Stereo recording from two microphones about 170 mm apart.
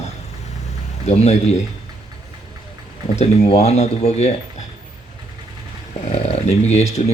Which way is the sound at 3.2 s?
35° left (ahead or behind).